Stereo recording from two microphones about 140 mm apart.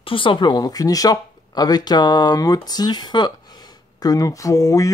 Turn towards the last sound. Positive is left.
turn(degrees=25)  # may be behind; listen again after turning